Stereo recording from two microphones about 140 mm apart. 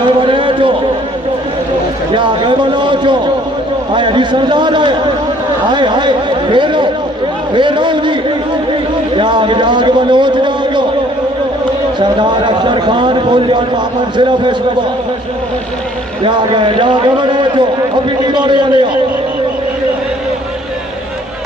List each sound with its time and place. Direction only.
0.2 s run: 35° right (ahead or behind)
2.1 s a man's voice: 35° right (ahead or behind)
9.1 s a man's voice: 35° right (ahead or behind)
11.9 s a man's voice: 35° right (ahead or behind)
16.2 s a man's voice: 35° right (ahead or behind)